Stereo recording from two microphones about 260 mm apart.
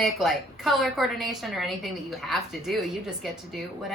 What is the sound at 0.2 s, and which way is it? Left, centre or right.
A woman's voice, centre.